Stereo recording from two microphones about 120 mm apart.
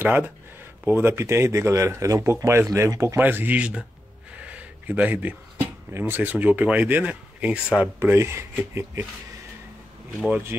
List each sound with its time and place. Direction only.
0.0 s speech: 15° right (ahead or behind)
4.4 s a sound: 10° right (ahead or behind)
5.9 s speech: 20° right (ahead or behind)
8.0 s speech: 20° right (ahead or behind)
10.2 s speech: 15° right (ahead or behind)